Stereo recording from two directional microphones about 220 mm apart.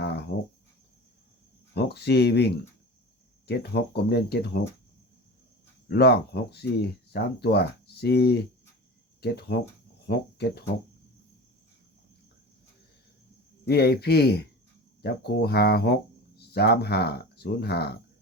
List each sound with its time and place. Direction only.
0.0 s cricket: 45° left (ahead or behind)
1.7 s speech: 50° left (ahead or behind)
5.9 s speech: 50° left (ahead or behind)
13.7 s speech: 45° left (ahead or behind)